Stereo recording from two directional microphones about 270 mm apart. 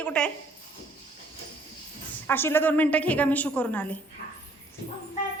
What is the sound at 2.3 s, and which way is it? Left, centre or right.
A woman's voice, centre.